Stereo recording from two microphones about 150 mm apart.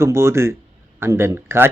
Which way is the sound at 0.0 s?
20° right (ahead or behind).